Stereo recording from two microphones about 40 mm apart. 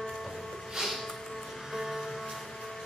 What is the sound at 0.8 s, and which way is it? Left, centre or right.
Music, centre.